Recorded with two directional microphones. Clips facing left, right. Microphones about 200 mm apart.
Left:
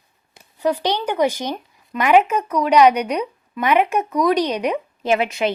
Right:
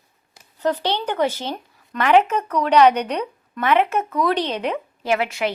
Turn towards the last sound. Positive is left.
turn(degrees=20)  # may be behind; listen again after turning